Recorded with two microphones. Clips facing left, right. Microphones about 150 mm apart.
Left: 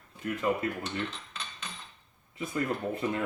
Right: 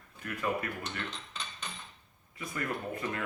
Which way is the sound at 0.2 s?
25° left (ahead or behind).